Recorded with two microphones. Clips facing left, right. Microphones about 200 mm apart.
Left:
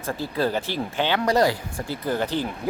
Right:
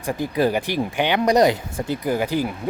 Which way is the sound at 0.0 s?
15° right (ahead or behind).